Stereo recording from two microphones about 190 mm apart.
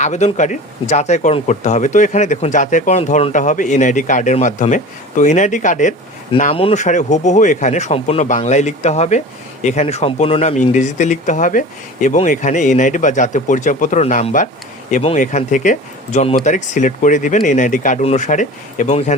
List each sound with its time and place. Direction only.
0.0 s speech: 35° left (ahead or behind)
6.5 s speech: 30° left (ahead or behind)